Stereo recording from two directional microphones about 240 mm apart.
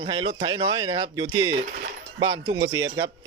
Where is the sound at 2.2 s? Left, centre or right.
Right.